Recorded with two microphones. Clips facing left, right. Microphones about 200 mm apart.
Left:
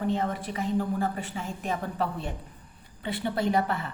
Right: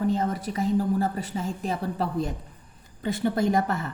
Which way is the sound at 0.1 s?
40° right (ahead or behind).